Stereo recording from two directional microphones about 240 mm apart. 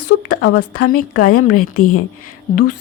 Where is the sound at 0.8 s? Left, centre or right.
Left.